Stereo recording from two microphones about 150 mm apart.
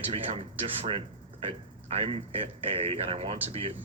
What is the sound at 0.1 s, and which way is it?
Speech, 40° right (ahead or behind).